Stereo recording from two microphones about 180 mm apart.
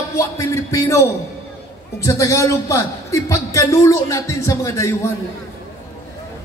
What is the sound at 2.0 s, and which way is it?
A man's voice, 15° left (ahead or behind).